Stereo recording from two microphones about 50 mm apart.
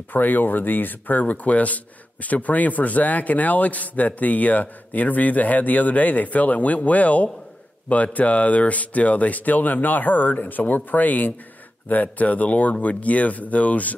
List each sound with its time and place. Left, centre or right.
0.1 s speech: left